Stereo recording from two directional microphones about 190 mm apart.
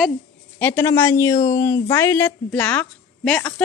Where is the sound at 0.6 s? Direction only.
10° left (ahead or behind).